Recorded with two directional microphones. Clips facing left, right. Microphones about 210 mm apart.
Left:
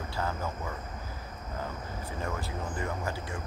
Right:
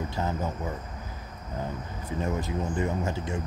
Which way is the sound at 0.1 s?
20° right (ahead or behind).